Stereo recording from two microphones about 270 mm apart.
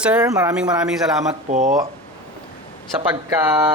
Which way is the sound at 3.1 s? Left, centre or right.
Centre.